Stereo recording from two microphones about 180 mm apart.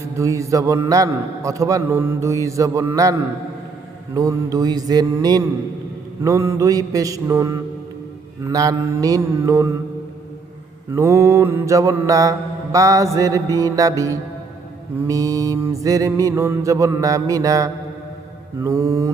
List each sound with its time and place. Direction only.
0.2 s a man's voice: 15° right (ahead or behind)
4.1 s mantra: 20° right (ahead or behind)
6.2 s a man's voice: 15° right (ahead or behind)
10.9 s a man's voice: 15° right (ahead or behind)
12.7 s mantra: 20° right (ahead or behind)
18.6 s a man's voice: 15° right (ahead or behind)